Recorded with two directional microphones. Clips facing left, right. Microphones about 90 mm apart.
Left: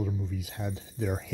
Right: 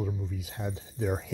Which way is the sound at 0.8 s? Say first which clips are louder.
Right 3 dB; 25° right (ahead or behind).